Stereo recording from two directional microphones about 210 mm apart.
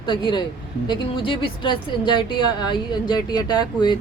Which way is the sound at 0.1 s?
20° left (ahead or behind).